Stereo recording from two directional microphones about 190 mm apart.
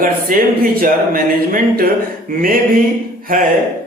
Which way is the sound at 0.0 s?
45° right (ahead or behind).